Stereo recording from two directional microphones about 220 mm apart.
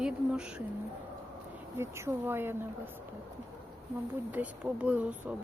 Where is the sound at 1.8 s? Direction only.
10° right (ahead or behind).